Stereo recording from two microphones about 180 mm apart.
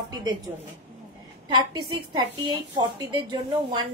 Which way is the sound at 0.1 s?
20° right (ahead or behind).